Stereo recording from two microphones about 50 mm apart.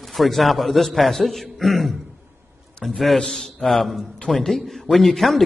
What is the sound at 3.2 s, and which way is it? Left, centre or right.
Speech, centre.